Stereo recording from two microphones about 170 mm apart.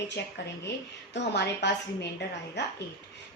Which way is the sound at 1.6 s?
90° left.